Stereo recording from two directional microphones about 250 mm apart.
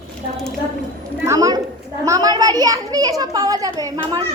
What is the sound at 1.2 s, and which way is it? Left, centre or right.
A child's voice, centre.